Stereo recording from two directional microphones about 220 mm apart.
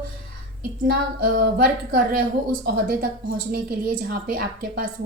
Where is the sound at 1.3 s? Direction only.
40° right (ahead or behind).